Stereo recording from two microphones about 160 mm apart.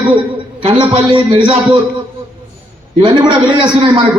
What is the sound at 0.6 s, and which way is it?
A man's voice, 35° right (ahead or behind).